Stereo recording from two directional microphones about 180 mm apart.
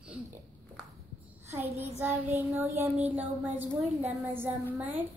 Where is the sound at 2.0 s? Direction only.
10° right (ahead or behind).